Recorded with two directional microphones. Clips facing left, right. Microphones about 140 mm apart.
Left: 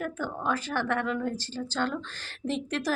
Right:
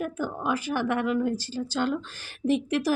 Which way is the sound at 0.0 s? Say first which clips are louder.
Right 2 dB; 10° right (ahead or behind).